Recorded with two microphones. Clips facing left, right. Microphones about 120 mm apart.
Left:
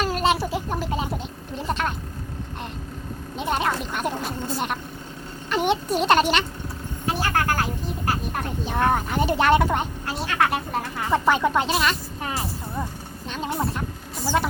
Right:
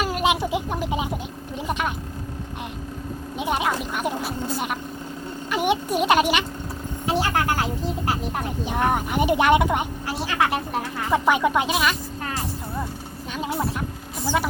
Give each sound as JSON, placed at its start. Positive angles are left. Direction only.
{"t": 0.0, "sound": "a sound", "side_deg": -10}
{"t": 1.5, "sound": "speech", "side_deg": -10}
{"t": 3.3, "sound": "speech", "side_deg": -10}
{"t": 7.0, "sound": "vehicle", "side_deg": -20}
{"t": 8.6, "sound": "speech", "side_deg": -15}
{"t": 10.1, "sound": "speech", "side_deg": -5}
{"t": 13.3, "sound": "speech", "side_deg": -5}